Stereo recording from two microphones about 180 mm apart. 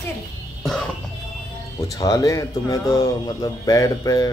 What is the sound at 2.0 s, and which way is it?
Speech, 20° left (ahead or behind).